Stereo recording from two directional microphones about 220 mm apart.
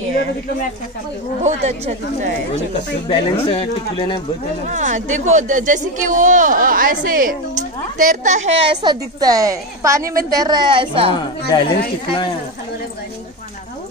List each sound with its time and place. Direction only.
1.4 s speech: 30° right (ahead or behind)
3.1 s speech: 25° left (ahead or behind)
4.6 s a woman's voice: 35° right (ahead or behind)
11.5 s speech: 20° left (ahead or behind)